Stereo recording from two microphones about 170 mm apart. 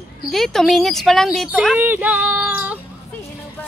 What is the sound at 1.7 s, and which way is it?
Speech, 10° right (ahead or behind).